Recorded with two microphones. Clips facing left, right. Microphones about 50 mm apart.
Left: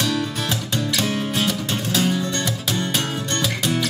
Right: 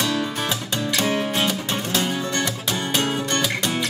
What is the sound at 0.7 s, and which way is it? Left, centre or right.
Music, right.